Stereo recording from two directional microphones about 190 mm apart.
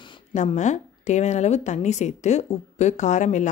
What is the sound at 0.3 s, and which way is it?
Speech, 40° left (ahead or behind).